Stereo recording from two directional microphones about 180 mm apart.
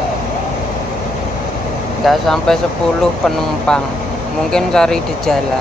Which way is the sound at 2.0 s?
Centre (ahead or behind).